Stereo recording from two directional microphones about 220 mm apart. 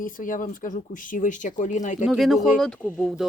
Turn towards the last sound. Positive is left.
turn(degrees=0)  # may be behind; listen again after turning